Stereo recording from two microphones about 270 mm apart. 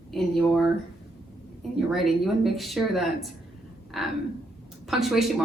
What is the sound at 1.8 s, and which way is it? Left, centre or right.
A woman's voice, centre.